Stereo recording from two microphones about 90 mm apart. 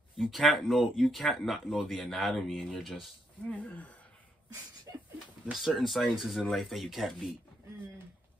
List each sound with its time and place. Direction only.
0.2 s speech: centre (ahead or behind)
3.4 s speech: 15° left (ahead or behind)
5.5 s speech: centre (ahead or behind)